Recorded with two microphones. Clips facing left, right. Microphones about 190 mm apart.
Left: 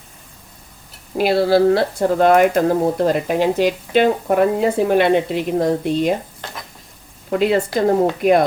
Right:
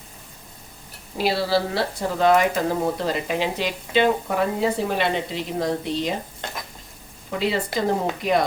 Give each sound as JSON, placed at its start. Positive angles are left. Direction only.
{"t": 1.2, "sound": "speech", "side_deg": 55}
{"t": 7.3, "sound": "speech", "side_deg": 55}